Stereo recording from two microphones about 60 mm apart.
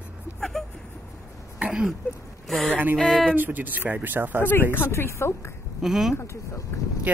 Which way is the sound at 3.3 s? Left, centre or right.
Right.